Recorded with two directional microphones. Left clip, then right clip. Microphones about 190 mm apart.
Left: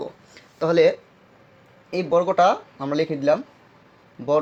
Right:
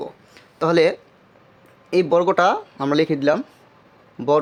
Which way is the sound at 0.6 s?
30° right (ahead or behind).